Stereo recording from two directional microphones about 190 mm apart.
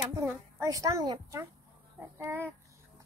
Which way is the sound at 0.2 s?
15° right (ahead or behind).